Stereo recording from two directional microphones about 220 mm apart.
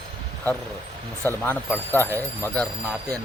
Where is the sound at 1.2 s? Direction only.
10° left (ahead or behind).